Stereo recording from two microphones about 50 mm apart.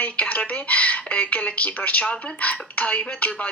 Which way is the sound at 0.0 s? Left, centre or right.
Left.